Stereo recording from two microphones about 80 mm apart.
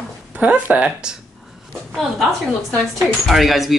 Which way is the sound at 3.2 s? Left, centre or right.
Centre.